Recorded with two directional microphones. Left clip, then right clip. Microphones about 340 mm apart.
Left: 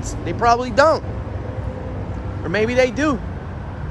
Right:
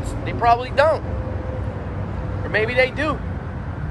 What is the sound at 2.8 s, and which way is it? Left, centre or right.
Speech, left.